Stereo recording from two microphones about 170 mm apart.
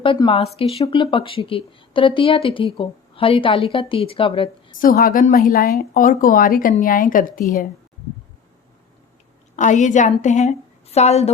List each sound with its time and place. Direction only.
0.0 s speech: 30° left (ahead or behind)
4.8 s a woman's voice: 60° left (ahead or behind)
9.6 s a woman's voice: 45° left (ahead or behind)